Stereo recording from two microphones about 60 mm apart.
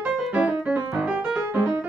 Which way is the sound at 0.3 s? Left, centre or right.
Right.